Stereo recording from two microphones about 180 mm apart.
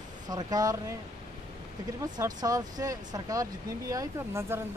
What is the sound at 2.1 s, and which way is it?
Speech, 20° right (ahead or behind).